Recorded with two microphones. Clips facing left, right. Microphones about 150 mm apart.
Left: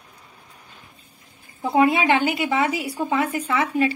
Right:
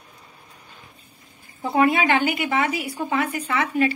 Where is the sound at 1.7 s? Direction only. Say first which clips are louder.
Left 1 dB; 20° left (ahead or behind).